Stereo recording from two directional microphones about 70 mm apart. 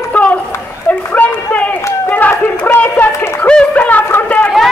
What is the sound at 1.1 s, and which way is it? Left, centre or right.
Run, left.